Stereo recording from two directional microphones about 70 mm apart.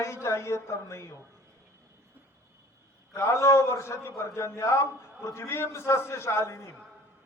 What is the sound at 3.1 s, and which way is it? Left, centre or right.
A man's voice, left.